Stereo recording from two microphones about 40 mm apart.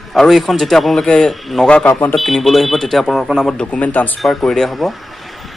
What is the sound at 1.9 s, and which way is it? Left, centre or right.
Speech, left.